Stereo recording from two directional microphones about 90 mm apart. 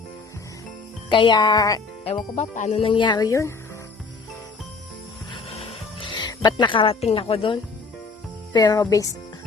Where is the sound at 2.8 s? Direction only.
65° left (ahead or behind).